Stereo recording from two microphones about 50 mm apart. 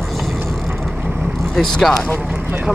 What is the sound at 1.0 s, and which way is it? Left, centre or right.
Vehicle, right.